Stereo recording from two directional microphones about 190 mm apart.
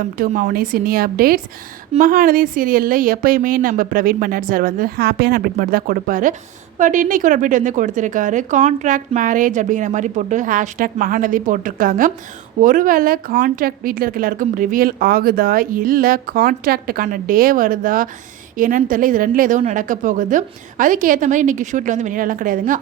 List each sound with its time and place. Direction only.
0.2 s speech: 45° right (ahead or behind)